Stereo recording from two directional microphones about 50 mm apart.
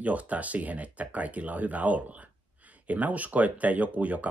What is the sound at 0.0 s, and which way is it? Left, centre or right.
Speech, right.